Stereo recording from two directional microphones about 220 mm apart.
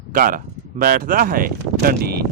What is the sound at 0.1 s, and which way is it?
Speech, 40° right (ahead or behind).